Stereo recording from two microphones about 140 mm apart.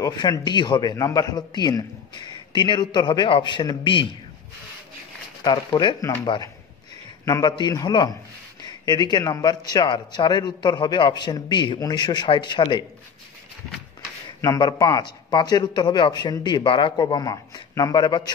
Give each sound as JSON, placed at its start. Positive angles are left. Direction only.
{"t": 0.0, "sound": "a man's voice", "side_deg": 30}
{"t": 5.4, "sound": "a man's voice", "side_deg": 30}
{"t": 14.4, "sound": "a man's voice", "side_deg": 25}